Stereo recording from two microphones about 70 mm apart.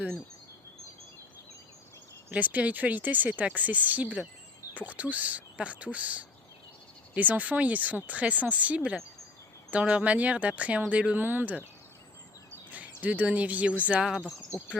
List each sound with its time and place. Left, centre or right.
2.3 s speech: right
12.7 s speech: right